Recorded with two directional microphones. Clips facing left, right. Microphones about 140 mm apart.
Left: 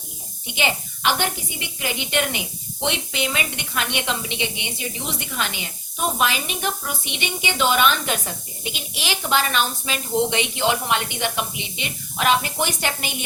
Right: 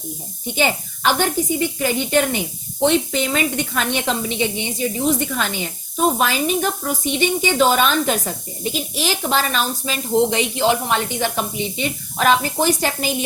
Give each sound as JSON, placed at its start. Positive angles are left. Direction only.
{"t": 0.4, "sound": "a woman's voice", "side_deg": -40}